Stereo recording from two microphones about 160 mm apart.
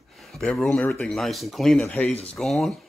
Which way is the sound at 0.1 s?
Centre (ahead or behind).